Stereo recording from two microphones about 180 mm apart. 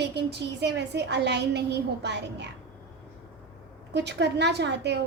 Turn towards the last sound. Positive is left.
turn(degrees=-70)  # may be behind; listen again after turning